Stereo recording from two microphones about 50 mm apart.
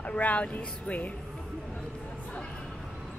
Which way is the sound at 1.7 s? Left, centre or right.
Left.